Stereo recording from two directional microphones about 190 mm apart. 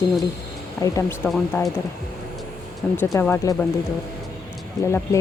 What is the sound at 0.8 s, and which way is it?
Speech, 15° left (ahead or behind).